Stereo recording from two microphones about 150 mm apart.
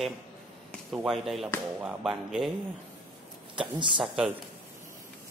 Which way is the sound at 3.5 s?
35° right (ahead or behind).